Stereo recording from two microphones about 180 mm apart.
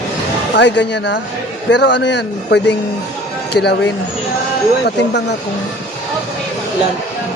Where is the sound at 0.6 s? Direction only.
75° left (ahead or behind).